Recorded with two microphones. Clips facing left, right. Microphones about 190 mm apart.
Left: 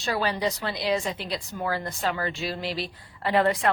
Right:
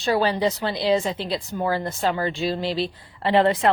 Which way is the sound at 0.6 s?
30° right (ahead or behind).